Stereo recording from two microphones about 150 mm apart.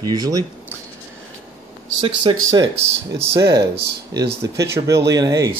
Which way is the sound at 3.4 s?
90° right.